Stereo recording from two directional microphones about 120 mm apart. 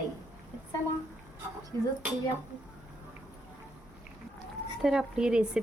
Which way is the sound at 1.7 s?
25° left (ahead or behind).